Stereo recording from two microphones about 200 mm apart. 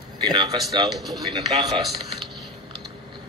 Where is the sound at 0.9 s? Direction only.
Centre (ahead or behind).